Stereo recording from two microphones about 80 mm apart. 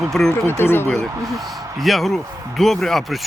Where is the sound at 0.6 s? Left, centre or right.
Left.